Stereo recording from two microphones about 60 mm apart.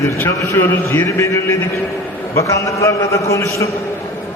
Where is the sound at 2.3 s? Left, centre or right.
Left.